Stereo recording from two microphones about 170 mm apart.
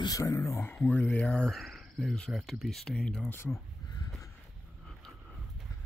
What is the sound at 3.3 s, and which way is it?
Speech, 15° left (ahead or behind).